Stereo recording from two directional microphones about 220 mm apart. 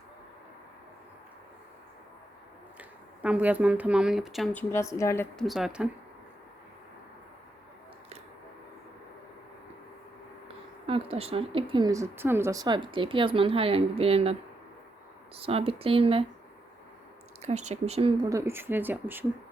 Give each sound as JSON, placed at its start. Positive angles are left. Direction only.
{"t": 3.2, "sound": "speech", "side_deg": -5}
{"t": 4.7, "sound": "a woman's voice", "side_deg": 15}
{"t": 5.5, "sound": "speech", "side_deg": 0}
{"t": 10.8, "sound": "speech", "side_deg": -25}
{"t": 15.4, "sound": "speech", "side_deg": -25}
{"t": 17.4, "sound": "speech", "side_deg": -30}
{"t": 18.3, "sound": "speech", "side_deg": -10}